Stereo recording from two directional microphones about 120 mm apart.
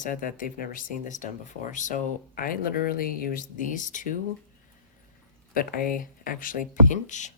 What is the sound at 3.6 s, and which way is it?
Speech, 90° left.